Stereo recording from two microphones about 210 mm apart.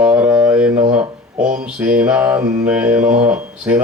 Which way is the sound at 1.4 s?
40° right (ahead or behind).